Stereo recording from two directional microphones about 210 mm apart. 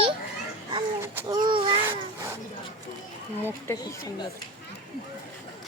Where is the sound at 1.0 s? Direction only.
15° right (ahead or behind).